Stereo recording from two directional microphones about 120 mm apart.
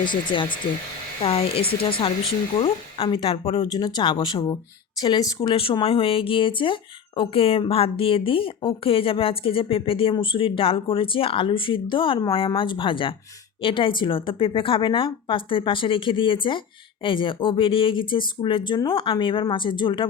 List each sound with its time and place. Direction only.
0.0 s speech: 40° left (ahead or behind)
1.2 s speech: 55° left (ahead or behind)
3.7 s speech: 35° left (ahead or behind)